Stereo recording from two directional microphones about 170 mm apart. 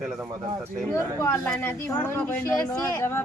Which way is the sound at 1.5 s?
5° left (ahead or behind).